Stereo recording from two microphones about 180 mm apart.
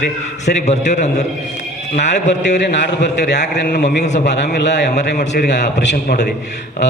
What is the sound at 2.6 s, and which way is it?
A man's voice, 75° left (ahead or behind).